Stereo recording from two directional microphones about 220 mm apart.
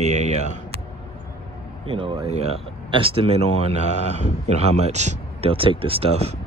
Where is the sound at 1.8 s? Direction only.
25° right (ahead or behind).